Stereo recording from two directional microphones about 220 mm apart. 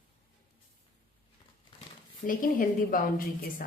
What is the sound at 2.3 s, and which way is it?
Speech, 40° left (ahead or behind).